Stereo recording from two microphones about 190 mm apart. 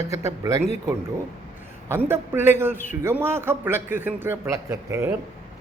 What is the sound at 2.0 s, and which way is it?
Speech, 10° right (ahead or behind).